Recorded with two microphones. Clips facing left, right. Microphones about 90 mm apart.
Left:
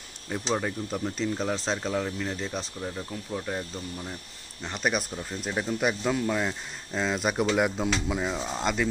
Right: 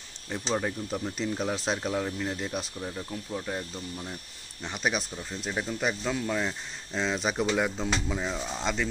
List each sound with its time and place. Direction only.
0.3 s speech: 5° left (ahead or behind)
2.8 s speech: 5° left (ahead or behind)